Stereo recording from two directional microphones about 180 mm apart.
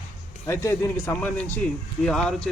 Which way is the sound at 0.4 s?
15° left (ahead or behind).